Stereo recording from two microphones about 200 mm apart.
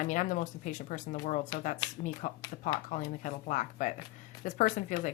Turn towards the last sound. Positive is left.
turn(degrees=40)  # may be behind; listen again after turning